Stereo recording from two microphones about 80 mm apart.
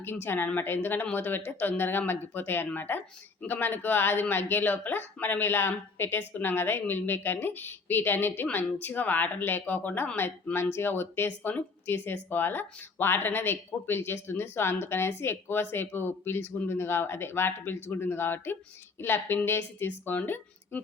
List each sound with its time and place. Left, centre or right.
0.0 s speech: left